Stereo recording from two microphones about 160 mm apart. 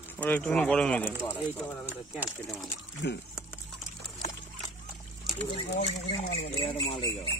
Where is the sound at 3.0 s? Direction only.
90° left.